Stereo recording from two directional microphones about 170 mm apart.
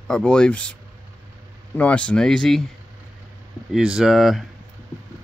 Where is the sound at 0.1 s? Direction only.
5° left (ahead or behind).